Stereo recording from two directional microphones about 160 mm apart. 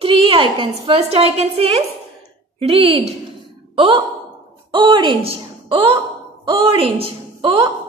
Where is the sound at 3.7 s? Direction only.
30° right (ahead or behind).